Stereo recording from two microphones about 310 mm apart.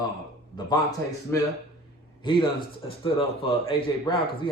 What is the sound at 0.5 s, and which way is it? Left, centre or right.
Speech, centre.